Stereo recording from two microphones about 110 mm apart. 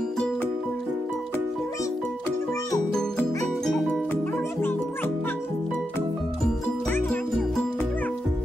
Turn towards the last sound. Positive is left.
turn(degrees=20)  # may be behind; listen again after turning